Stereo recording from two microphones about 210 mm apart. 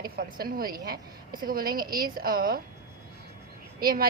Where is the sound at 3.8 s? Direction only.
45° right (ahead or behind).